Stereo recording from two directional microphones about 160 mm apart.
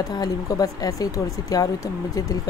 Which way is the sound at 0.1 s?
25° left (ahead or behind).